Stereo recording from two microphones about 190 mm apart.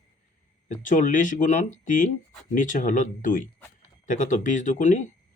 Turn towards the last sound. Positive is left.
turn(degrees=40)  # may be behind; listen again after turning